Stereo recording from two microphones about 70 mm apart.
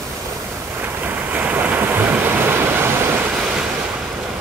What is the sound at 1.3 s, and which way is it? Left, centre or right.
Waves, right.